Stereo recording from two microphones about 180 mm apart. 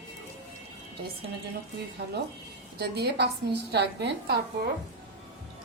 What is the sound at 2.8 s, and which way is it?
A woman's voice, 65° right (ahead or behind).